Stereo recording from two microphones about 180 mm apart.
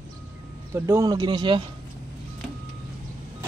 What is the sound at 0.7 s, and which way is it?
Speech, 15° right (ahead or behind).